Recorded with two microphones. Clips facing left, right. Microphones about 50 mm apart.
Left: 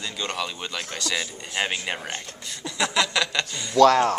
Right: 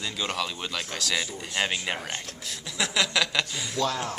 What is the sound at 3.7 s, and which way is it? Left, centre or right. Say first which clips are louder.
Speech: left 13 dB; left.